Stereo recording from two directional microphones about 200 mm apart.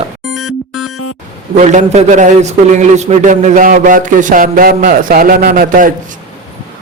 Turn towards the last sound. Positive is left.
turn(degrees=-45)  # may be behind; listen again after turning